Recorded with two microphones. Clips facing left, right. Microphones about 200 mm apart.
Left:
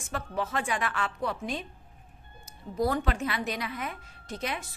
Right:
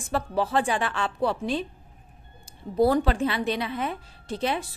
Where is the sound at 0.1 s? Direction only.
35° right (ahead or behind).